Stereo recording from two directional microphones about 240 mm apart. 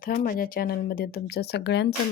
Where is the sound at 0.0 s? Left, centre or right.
Left.